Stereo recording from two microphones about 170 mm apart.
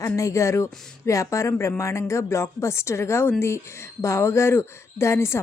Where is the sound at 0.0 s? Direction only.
20° left (ahead or behind).